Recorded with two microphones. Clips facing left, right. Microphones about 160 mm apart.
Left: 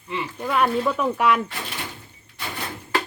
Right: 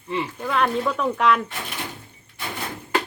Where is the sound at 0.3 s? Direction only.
10° left (ahead or behind).